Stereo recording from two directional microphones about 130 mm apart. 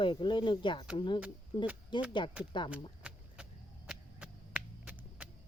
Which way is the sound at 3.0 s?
5° right (ahead or behind).